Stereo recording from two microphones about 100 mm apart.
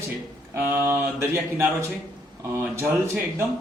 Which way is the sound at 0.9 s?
20° right (ahead or behind).